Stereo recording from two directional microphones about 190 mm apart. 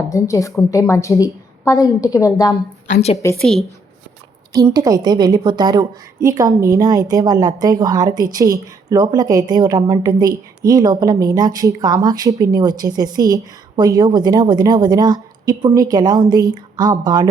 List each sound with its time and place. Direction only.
0.1 s a woman's voice: 15° left (ahead or behind)
2.8 s a woman's voice: 35° left (ahead or behind)
3.4 s speech: centre (ahead or behind)
4.5 s a woman's voice: 20° right (ahead or behind)